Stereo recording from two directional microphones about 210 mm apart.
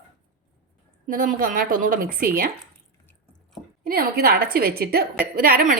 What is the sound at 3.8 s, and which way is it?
A woman's voice, 45° right (ahead or behind).